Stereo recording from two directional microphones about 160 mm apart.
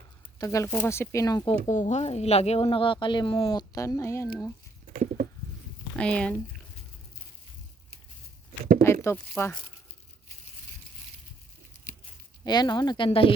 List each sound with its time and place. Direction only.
0.3 s speech: 20° left (ahead or behind)
1.7 s speech: 50° left (ahead or behind); by 4.3 s 15° left (ahead or behind)
4.9 s a sound: 60° right (ahead or behind)
6.0 s speech: 5° left (ahead or behind)
8.8 s speech: 15° left (ahead or behind)
12.5 s speech: 25° left (ahead or behind)